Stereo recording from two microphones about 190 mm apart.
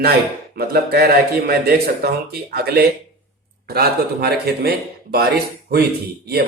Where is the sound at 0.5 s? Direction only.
55° right (ahead or behind).